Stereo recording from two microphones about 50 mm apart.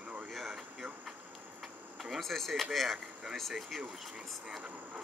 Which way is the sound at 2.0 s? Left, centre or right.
Centre.